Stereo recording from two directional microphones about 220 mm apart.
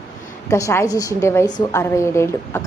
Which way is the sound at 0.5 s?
10° left (ahead or behind).